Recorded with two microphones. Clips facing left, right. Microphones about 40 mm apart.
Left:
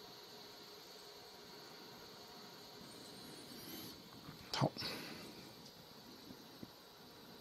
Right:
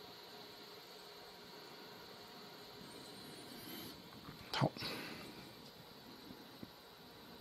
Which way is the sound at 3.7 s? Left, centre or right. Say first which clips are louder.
Right 1 dB; centre.